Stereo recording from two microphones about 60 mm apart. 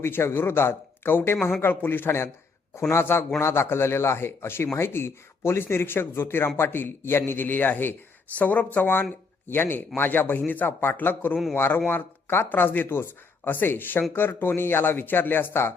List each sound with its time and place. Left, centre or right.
0.0 s speech: left